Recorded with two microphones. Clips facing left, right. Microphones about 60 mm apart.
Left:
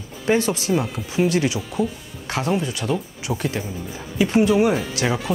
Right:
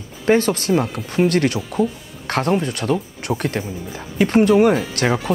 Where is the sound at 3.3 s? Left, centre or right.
Centre.